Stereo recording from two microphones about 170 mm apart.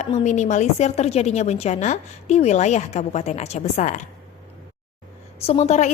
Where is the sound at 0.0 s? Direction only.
45° left (ahead or behind).